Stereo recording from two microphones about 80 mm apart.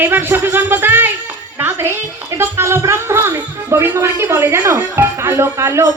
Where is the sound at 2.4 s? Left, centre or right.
Right.